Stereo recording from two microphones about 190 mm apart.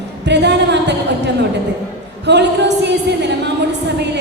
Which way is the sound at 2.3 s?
65° right (ahead or behind).